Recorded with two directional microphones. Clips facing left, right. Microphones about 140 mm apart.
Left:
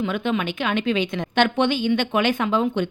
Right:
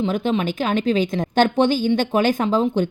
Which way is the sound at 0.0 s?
35° right (ahead or behind).